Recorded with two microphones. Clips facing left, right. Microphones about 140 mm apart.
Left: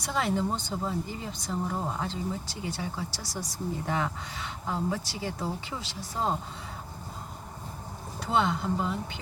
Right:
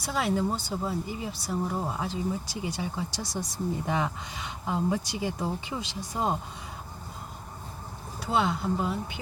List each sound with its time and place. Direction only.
0.0 s speech: 5° right (ahead or behind)
8.2 s speech: 5° right (ahead or behind)